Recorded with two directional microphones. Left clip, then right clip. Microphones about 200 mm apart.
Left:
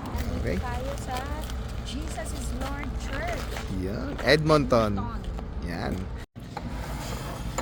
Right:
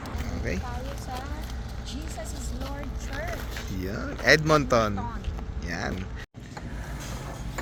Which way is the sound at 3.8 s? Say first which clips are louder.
Even; 5° left (ahead or behind).